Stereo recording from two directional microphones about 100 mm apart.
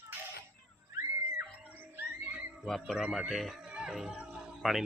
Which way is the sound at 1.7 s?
20° right (ahead or behind).